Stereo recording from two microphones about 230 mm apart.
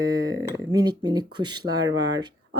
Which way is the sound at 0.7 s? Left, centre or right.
Centre.